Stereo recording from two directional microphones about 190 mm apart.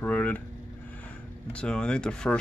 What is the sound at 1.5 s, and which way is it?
Speech, 5° left (ahead or behind).